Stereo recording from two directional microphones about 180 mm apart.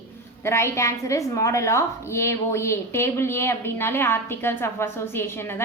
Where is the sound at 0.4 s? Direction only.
15° left (ahead or behind).